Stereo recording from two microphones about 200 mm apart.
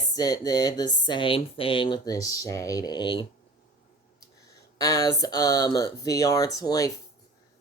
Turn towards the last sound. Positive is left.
turn(degrees=20)  # may be behind; listen again after turning